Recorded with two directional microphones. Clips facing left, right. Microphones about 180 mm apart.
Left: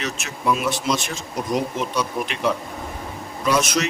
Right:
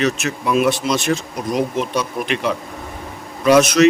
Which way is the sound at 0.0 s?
65° right (ahead or behind).